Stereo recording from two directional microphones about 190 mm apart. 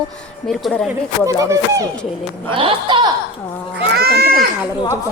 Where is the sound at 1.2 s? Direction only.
15° right (ahead or behind).